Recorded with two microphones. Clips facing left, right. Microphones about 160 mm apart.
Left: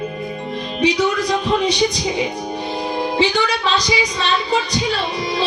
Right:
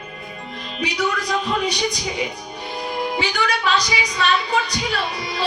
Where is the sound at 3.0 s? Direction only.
25° left (ahead or behind).